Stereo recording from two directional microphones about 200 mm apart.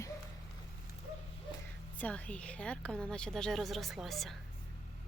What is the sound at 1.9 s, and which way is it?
A woman's voice, 5° left (ahead or behind).